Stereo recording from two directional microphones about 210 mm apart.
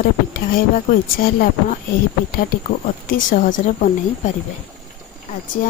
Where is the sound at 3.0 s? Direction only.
40° left (ahead or behind).